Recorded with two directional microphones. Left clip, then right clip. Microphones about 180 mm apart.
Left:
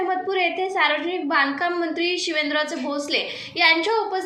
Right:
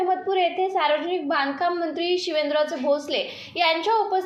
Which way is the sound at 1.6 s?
40° right (ahead or behind).